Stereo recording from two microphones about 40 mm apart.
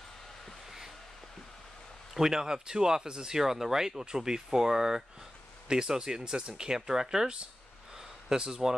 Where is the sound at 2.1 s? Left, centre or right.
Centre.